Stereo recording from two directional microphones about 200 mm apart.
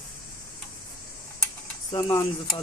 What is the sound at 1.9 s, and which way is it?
Speech, 20° left (ahead or behind).